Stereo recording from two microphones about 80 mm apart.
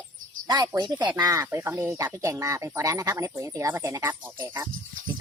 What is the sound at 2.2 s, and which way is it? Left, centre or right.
Speech, right.